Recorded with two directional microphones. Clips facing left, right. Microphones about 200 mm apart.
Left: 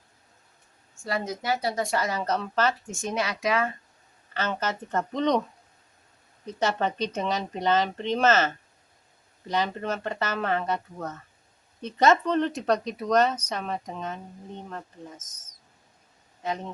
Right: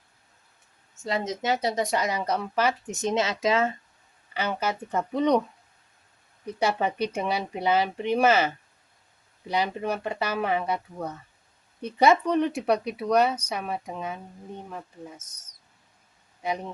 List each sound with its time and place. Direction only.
1.0 s speech: 20° right (ahead or behind)
4.4 s speech: 10° right (ahead or behind)
6.4 s speech: 10° right (ahead or behind)
16.4 s speech: 10° right (ahead or behind)